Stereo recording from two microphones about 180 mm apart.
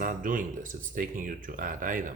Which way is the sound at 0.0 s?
50° right (ahead or behind).